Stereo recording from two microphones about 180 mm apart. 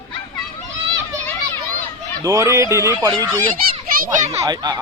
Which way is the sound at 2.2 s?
15° right (ahead or behind).